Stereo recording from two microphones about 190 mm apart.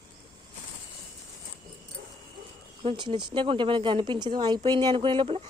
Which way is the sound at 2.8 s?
25° right (ahead or behind).